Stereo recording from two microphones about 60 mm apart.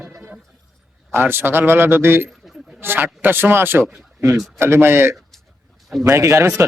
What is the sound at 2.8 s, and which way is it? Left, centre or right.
A man's voice, right.